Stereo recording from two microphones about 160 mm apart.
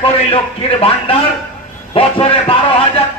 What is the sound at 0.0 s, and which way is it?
Speech, 35° left (ahead or behind).